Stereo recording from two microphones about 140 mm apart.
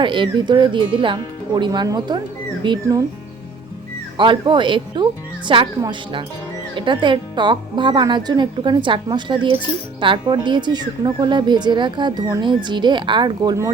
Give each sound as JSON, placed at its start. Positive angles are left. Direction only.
{"t": 0.0, "sound": "a woman's voice", "side_deg": -35}
{"t": 4.2, "sound": "a woman's voice", "side_deg": -35}